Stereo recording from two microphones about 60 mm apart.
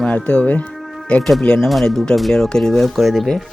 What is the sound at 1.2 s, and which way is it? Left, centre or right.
Speech, centre.